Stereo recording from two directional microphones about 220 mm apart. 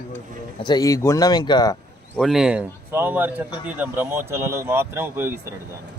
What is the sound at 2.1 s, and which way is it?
Speech, centre (ahead or behind).